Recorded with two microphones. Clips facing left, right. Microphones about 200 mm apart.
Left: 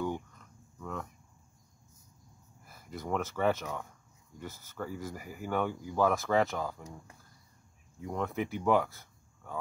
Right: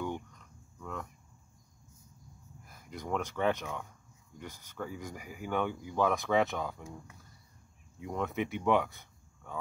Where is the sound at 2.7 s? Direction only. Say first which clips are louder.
Left 1 dB; 5° left (ahead or behind).